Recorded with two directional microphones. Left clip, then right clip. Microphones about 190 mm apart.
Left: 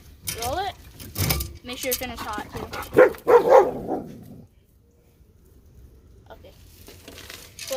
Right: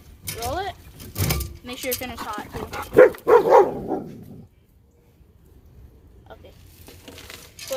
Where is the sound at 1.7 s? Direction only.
5° left (ahead or behind).